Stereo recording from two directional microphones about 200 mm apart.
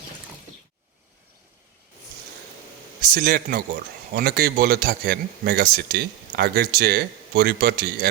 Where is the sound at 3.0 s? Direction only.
45° right (ahead or behind).